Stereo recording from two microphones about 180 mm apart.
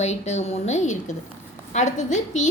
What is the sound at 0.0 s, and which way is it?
A woman's voice, 40° left (ahead or behind).